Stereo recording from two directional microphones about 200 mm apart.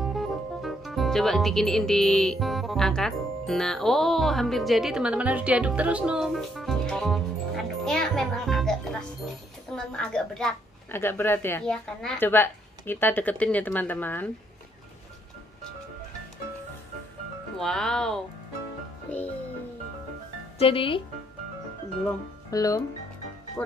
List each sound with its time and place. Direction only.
0.0 s speech: centre (ahead or behind)
17.6 s speech: 5° left (ahead or behind)
20.5 s speech: 30° left (ahead or behind)
22.5 s speech: 15° left (ahead or behind)